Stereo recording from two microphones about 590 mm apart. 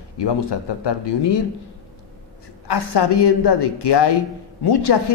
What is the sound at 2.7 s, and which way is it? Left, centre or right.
Speech, left.